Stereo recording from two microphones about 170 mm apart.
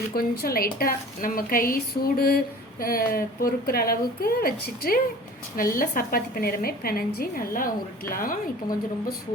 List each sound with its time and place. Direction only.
0.1 s a woman's voice: 60° left (ahead or behind)